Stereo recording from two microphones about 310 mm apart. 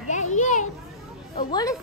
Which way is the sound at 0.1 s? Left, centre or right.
Left.